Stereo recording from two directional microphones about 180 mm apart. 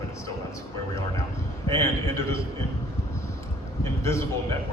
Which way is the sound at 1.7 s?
15° left (ahead or behind).